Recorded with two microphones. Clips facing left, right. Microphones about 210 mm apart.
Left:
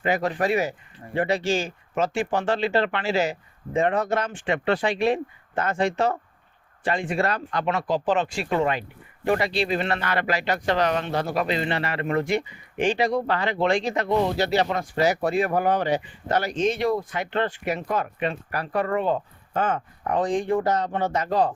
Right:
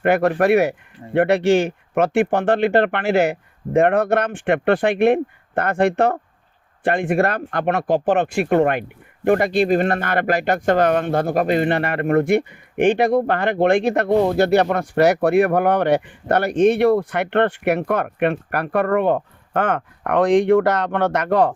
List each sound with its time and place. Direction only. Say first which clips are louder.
0.0 s speech: right 7 dB; 65° right (ahead or behind)